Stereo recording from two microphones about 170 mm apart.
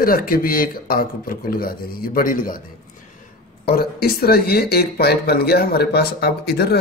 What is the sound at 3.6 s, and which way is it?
Speech, 65° left (ahead or behind).